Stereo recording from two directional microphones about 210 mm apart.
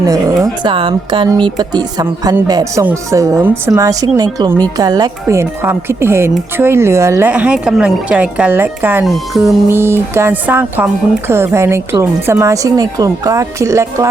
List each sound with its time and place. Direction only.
0.0 s speech: 15° right (ahead or behind); by 9.5 s centre (ahead or behind)
9.6 s speech: 10° right (ahead or behind)